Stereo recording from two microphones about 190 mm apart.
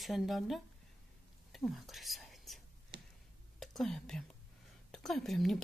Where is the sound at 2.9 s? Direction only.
65° right (ahead or behind).